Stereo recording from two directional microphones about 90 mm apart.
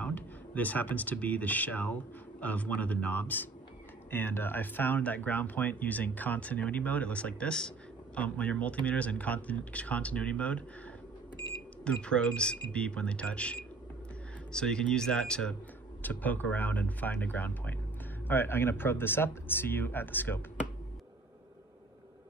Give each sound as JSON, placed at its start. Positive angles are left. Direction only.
{"t": 0.0, "sound": "speech", "side_deg": 20}
{"t": 11.8, "sound": "speech", "side_deg": 10}